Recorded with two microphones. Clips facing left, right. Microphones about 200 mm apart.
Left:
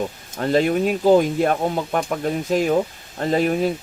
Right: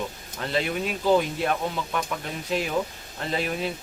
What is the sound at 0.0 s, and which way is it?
Speech, 45° left (ahead or behind).